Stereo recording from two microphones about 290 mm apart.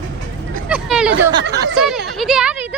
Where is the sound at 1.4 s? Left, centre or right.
Right.